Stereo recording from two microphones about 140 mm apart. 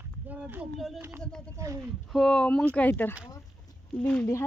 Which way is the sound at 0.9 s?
20° right (ahead or behind).